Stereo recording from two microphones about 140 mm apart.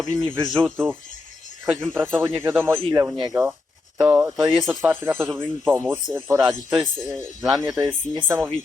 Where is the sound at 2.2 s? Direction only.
15° right (ahead or behind).